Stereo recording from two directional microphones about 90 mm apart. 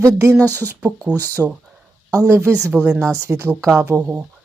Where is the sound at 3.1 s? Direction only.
35° right (ahead or behind).